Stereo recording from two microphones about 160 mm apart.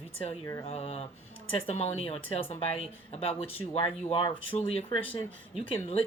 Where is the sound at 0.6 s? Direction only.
40° left (ahead or behind).